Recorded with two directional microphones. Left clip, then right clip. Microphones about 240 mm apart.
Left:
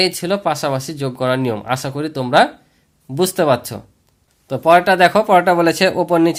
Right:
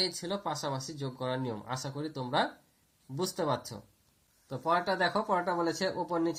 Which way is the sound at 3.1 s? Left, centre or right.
Left.